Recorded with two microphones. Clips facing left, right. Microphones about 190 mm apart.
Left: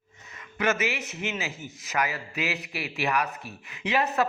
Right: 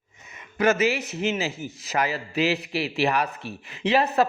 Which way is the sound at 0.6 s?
35° right (ahead or behind).